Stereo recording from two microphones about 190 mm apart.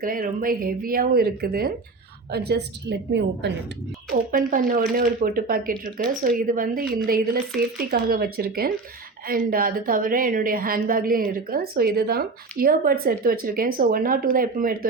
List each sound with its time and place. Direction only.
0.0 s a woman's voice: 50° right (ahead or behind); by 3.5 s 65° right (ahead or behind)
4.1 s a woman's voice: 45° right (ahead or behind)